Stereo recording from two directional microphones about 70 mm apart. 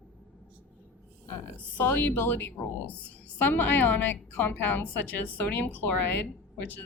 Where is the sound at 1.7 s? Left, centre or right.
Left.